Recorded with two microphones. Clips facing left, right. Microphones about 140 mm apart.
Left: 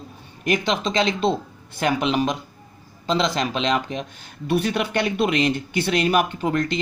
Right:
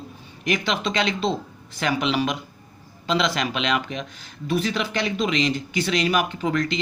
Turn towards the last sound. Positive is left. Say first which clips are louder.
# left 1 dB
turn(degrees=45)  # may be behind; listen again after turning